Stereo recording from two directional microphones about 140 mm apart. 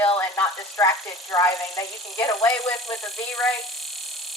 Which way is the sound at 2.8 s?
Centre (ahead or behind).